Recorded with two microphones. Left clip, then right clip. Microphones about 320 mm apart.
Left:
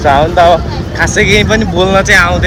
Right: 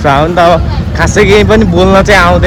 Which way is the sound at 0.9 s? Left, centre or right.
Right.